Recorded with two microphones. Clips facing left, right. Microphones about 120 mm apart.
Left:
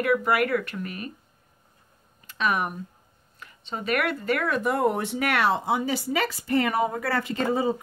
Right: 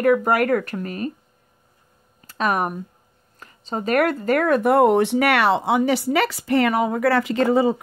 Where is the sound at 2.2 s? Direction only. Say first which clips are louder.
Right 4 dB; 40° right (ahead or behind).